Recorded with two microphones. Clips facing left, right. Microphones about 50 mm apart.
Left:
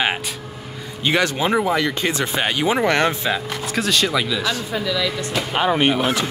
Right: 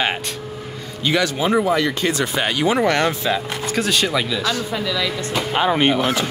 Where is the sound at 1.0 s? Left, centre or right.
Left.